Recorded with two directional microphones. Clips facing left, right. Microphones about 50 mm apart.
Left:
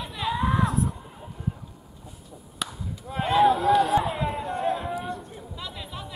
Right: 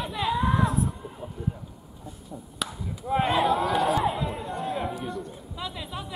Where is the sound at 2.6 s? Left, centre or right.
Centre.